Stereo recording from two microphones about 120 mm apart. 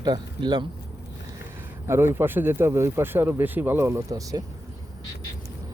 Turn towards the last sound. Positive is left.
turn(degrees=-30)  # may be behind; listen again after turning